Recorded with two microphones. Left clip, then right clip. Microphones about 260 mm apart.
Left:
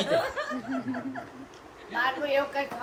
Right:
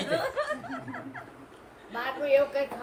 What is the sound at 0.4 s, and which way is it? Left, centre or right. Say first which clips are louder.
Laughter: right 3 dB; centre.